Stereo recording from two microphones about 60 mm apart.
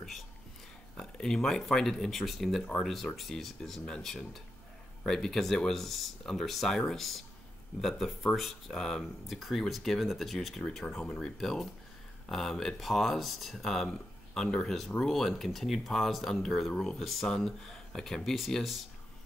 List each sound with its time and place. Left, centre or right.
0.9 s speech: centre
11.0 s speech: centre
11.3 s speech: centre